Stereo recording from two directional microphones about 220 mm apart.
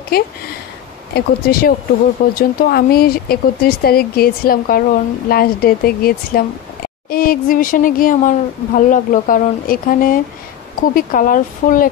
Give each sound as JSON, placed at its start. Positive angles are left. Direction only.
{"t": 0.1, "sound": "speech", "side_deg": 45}